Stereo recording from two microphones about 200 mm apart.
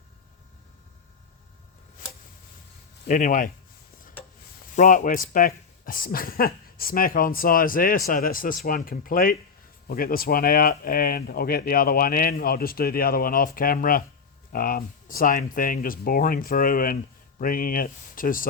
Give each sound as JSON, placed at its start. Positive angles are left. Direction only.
{"t": 3.1, "sound": "speech", "side_deg": 40}
{"t": 4.7, "sound": "speech", "side_deg": 40}